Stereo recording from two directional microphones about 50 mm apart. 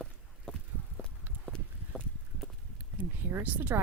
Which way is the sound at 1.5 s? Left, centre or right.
Centre.